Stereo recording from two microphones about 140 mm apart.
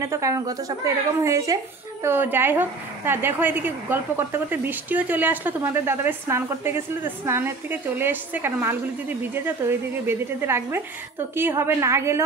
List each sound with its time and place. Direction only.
0.0 s a woman's voice: 20° right (ahead or behind)